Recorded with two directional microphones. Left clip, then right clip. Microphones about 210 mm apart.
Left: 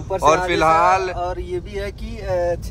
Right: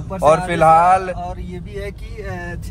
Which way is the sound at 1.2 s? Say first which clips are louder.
Left 5 dB; 55° left (ahead or behind).